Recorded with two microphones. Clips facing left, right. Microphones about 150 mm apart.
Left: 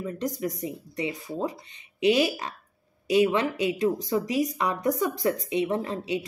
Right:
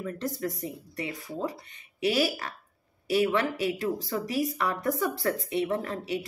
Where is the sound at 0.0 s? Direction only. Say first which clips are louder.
Left 2 dB; 15° left (ahead or behind).